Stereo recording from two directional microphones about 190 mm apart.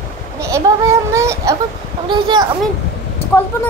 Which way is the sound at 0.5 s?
15° right (ahead or behind).